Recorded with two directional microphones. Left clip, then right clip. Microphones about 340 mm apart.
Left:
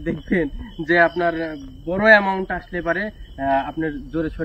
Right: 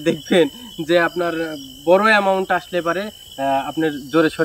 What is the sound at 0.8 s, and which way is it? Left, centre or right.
Speech, centre.